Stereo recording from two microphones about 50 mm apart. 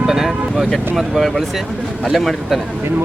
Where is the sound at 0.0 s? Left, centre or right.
Centre.